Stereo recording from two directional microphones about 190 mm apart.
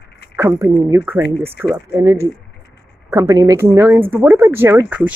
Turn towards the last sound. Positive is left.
turn(degrees=-10)  # may be behind; listen again after turning